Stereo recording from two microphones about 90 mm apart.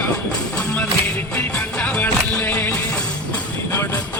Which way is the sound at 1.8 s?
20° left (ahead or behind).